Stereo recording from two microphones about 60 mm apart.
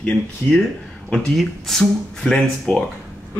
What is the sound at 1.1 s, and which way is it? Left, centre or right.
Speech, centre.